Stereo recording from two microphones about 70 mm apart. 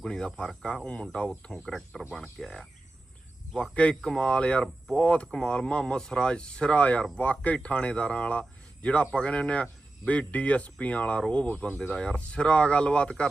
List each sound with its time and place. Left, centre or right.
0.0 s speech: centre
3.8 s speech: centre
11.7 s speech: centre